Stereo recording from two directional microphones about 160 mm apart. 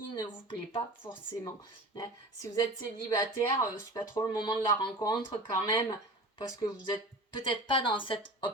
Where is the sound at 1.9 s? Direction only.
25° left (ahead or behind).